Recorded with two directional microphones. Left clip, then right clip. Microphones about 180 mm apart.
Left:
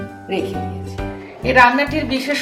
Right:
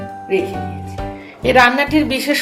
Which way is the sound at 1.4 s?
45° right (ahead or behind).